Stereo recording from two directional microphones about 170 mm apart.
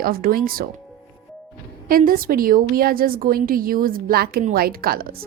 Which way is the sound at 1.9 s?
55° right (ahead or behind).